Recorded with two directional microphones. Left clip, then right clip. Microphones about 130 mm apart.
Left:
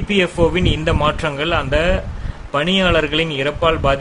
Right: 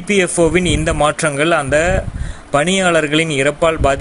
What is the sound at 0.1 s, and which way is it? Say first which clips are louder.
Speech: right 3 dB; 35° right (ahead or behind).